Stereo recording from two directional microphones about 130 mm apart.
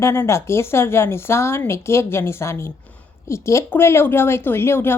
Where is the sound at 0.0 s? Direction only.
20° left (ahead or behind).